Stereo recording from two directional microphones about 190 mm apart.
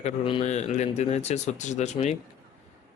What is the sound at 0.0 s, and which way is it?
Speech, 30° left (ahead or behind).